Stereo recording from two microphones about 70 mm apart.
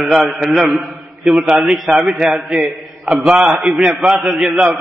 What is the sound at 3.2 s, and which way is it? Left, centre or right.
A man's voice, centre.